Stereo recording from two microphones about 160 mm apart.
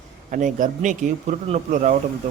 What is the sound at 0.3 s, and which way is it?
A man's voice, 55° right (ahead or behind).